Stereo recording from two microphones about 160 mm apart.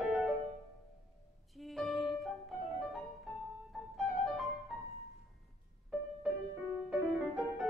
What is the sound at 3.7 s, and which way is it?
Music, centre (ahead or behind).